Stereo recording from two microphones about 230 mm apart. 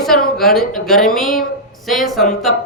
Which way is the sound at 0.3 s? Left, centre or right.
Centre.